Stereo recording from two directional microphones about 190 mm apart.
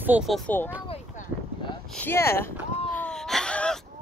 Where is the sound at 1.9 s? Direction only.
10° left (ahead or behind).